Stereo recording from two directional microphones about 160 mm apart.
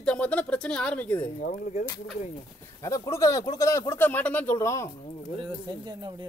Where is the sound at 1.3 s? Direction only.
50° left (ahead or behind).